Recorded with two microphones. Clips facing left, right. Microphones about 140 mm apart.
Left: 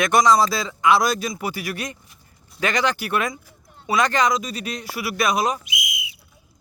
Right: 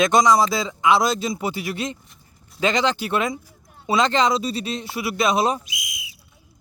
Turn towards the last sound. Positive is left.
turn(degrees=-35)  # may be behind; listen again after turning